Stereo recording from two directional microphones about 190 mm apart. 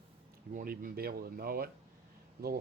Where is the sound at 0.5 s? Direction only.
45° right (ahead or behind).